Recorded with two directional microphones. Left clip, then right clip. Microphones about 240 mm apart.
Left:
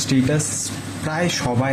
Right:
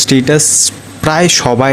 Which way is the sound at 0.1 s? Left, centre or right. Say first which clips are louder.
Right 8 dB; right.